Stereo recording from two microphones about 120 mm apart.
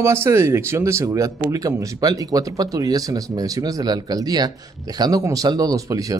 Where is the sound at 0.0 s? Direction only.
20° right (ahead or behind).